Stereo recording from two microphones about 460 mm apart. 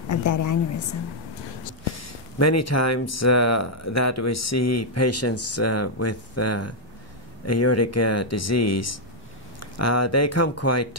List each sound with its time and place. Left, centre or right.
0.1 s speech: left
2.3 s speech: left